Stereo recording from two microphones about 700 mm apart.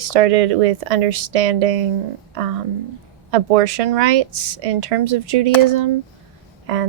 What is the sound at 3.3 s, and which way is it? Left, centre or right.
Speech, right.